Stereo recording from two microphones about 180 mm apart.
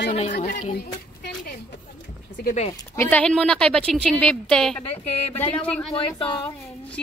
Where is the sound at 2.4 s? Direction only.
40° left (ahead or behind).